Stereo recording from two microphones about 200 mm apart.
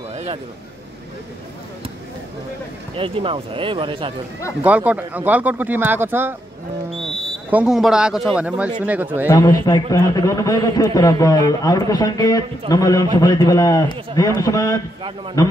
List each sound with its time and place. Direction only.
0.1 s a sound: 30° right (ahead or behind)
3.0 s speech: 25° right (ahead or behind)
4.6 s speech: 5° right (ahead or behind)
7.0 s a sound: centre (ahead or behind)
8.4 s speech: 5° right (ahead or behind)
9.3 s a man's voice: 15° left (ahead or behind)